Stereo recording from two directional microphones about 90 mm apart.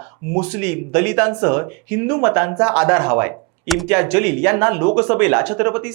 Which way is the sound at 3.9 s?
15° right (ahead or behind).